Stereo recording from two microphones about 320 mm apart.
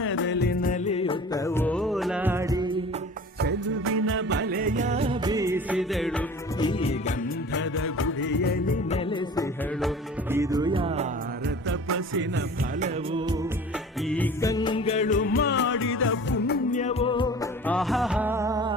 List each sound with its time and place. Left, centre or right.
0.0 s music: left; by 2.7 s centre
3.4 s music of bollywood: right; by 6.2 s centre
6.6 s music: centre
7.5 s music: left
9.0 s music: centre
10.3 s music: centre
11.9 s music: right
14.1 s music: centre
17.7 s music: centre